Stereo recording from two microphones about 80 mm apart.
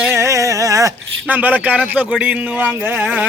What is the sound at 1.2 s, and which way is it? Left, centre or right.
Speech, centre.